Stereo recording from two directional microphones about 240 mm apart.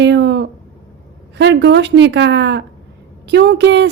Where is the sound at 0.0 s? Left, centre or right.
Right.